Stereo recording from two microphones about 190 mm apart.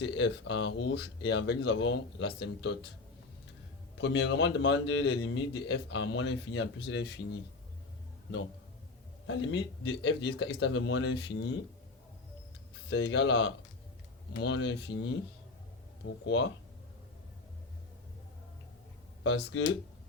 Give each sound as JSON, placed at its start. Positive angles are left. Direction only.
{"t": 0.0, "sound": "speech", "side_deg": 65}
{"t": 3.9, "sound": "speech", "side_deg": 75}
{"t": 6.8, "sound": "speech", "side_deg": 65}
{"t": 9.2, "sound": "speech", "side_deg": 75}
{"t": 12.9, "sound": "speech", "side_deg": 70}
{"t": 16.2, "sound": "speech", "side_deg": 65}
{"t": 19.2, "sound": "speech", "side_deg": 65}